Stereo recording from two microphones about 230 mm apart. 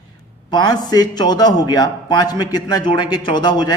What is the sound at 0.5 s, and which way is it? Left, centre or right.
Speech, centre.